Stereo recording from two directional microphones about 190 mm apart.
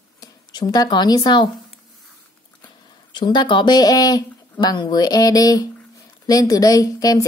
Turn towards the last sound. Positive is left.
turn(degrees=20)  # may be behind; listen again after turning